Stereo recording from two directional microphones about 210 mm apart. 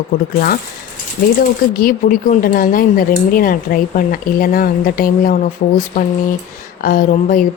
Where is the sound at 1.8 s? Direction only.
40° left (ahead or behind).